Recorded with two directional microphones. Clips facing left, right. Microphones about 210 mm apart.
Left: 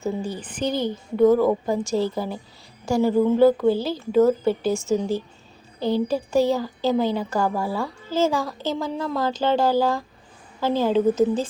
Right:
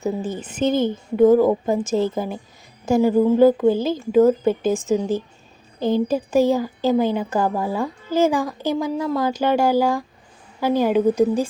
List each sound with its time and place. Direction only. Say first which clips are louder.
0.3 s speech: right 5 dB; 25° right (ahead or behind)